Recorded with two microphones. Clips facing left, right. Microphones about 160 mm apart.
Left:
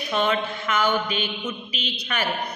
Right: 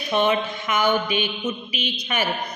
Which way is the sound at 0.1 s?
15° right (ahead or behind).